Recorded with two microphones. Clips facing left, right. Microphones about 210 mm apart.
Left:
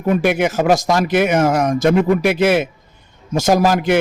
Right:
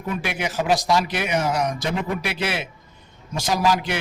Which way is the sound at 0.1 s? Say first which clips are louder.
Left 11 dB; 50° left (ahead or behind).